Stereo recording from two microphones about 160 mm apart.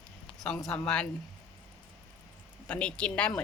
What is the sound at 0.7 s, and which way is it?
Speech, 5° left (ahead or behind).